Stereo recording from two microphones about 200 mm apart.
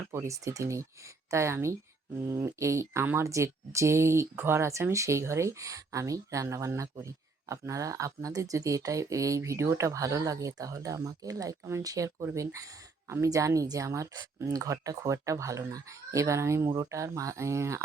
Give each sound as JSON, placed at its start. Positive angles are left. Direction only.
{"t": 0.1, "sound": "speech", "side_deg": -15}